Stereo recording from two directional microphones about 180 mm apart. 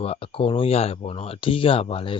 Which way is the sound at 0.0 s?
30° left (ahead or behind).